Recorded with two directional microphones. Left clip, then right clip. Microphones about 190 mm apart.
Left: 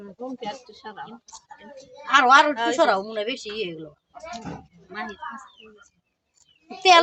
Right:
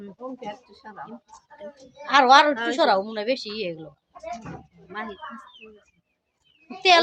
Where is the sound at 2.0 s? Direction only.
15° right (ahead or behind).